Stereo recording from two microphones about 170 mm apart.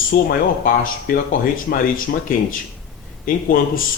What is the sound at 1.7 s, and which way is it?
Speech, 55° left (ahead or behind).